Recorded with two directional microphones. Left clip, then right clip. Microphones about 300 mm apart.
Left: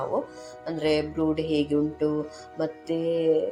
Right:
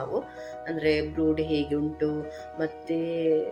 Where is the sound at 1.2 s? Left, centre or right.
Centre.